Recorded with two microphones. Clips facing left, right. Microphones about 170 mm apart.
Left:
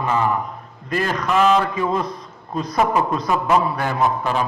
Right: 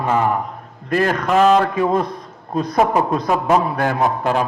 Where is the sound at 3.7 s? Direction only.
45° right (ahead or behind).